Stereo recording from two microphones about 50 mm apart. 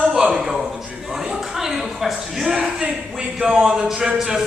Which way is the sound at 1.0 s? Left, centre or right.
Centre.